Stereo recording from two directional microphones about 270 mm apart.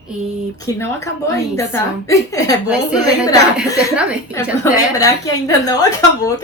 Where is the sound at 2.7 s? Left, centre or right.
Centre.